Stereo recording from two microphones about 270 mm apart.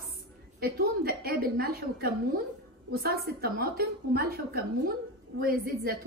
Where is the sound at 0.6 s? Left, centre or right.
Right.